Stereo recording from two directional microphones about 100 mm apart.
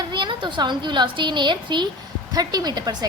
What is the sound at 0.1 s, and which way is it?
A woman's voice, 50° right (ahead or behind).